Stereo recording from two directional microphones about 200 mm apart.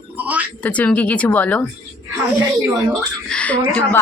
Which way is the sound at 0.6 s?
5° left (ahead or behind).